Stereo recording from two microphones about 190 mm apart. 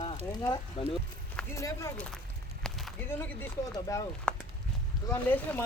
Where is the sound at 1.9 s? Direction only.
5° left (ahead or behind).